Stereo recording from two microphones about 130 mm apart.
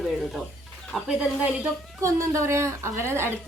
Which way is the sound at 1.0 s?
5° right (ahead or behind).